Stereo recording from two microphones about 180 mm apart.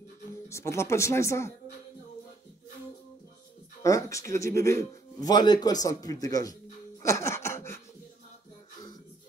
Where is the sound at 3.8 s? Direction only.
15° left (ahead or behind).